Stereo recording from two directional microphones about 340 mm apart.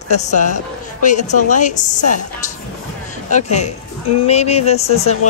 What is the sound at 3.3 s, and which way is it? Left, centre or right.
Speech, centre.